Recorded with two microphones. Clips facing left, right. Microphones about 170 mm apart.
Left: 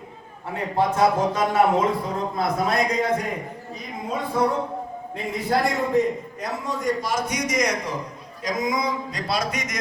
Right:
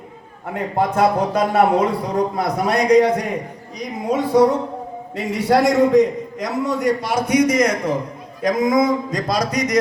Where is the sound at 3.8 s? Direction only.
80° right.